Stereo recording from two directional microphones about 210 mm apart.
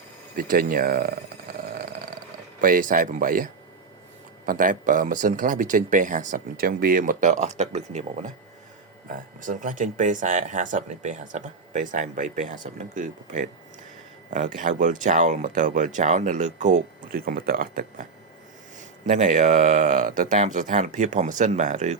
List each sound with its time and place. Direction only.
0.3 s speech: 40° right (ahead or behind)
1.7 s a sound: 45° right (ahead or behind)
2.6 s speech: 40° right (ahead or behind)
9.4 s speech: 40° right (ahead or behind)
19.0 s speech: 35° right (ahead or behind)